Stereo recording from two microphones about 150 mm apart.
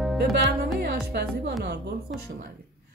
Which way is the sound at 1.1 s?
90° right.